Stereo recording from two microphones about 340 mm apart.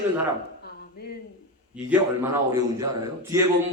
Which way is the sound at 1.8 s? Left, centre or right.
Centre.